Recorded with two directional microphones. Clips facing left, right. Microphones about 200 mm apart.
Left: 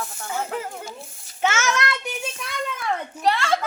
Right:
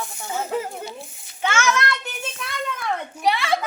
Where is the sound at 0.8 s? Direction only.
45° left (ahead or behind).